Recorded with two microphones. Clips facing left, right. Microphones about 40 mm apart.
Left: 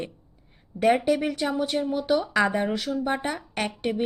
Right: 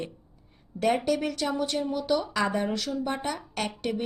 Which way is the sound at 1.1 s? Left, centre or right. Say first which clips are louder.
Left 3 dB; centre.